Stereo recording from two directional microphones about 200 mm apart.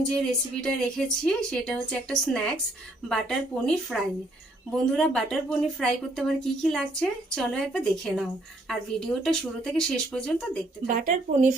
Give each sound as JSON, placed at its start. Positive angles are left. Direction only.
{"t": 0.1, "sound": "a woman's voice", "side_deg": 5}
{"t": 10.8, "sound": "speech", "side_deg": -40}